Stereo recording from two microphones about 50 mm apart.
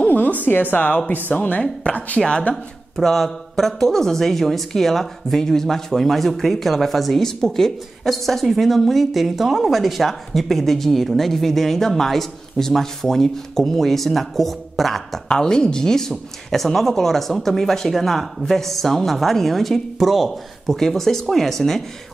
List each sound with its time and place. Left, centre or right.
0.1 s a woman's voice: left
2.5 s speech: centre
15.2 s speech: centre